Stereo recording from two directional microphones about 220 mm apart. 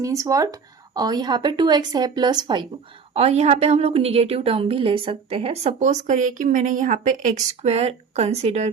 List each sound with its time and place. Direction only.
0.0 s a woman's voice: 15° right (ahead or behind)